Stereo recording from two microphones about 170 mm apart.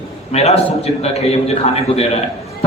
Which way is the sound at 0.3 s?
40° left (ahead or behind).